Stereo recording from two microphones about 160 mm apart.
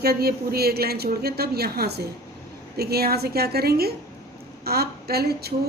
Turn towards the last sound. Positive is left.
turn(degrees=-80)